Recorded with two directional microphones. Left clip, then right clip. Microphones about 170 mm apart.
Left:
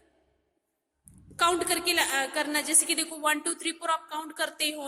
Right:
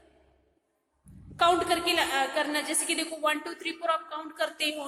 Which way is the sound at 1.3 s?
35° left (ahead or behind).